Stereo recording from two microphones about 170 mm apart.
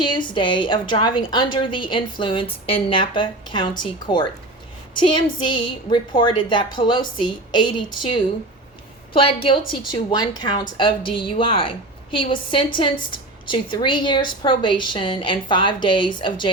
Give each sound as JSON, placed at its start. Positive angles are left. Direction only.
{"t": 0.0, "sound": "a woman's voice", "side_deg": 25}
{"t": 5.0, "sound": "a woman's voice", "side_deg": 30}